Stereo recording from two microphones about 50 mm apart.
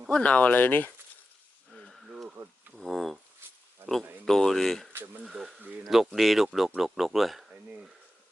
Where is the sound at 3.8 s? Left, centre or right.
Centre.